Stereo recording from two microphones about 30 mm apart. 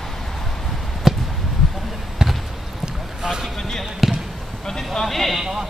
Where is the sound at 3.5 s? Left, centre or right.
Centre.